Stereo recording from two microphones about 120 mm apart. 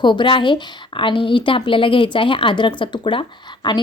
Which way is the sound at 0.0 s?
40° left (ahead or behind).